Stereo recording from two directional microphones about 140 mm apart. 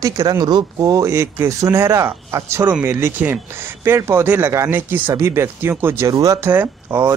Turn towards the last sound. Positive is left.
turn(degrees=-15)  # may be behind; listen again after turning